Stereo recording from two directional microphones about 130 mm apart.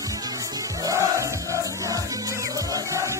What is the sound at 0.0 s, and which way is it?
Music, 25° right (ahead or behind).